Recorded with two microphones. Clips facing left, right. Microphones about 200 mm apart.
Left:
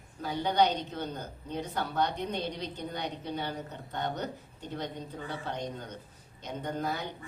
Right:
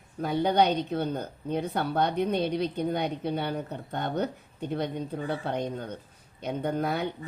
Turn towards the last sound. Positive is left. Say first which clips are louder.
# right 5 dB
turn(degrees=-60)  # may be behind; listen again after turning